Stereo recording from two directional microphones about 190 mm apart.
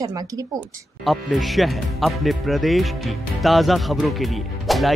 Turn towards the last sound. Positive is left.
turn(degrees=0)  # may be behind; listen again after turning